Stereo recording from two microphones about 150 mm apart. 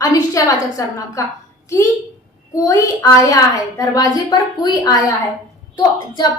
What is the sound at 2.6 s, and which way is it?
A woman's voice, 20° left (ahead or behind).